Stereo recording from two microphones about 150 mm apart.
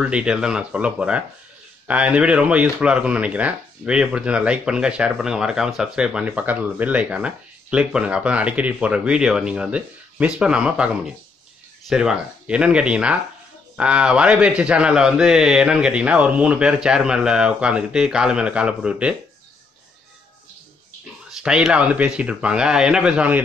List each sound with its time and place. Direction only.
0.0 s speech: 5° right (ahead or behind)
11.9 s speech: 5° right (ahead or behind)
21.4 s speech: 5° right (ahead or behind)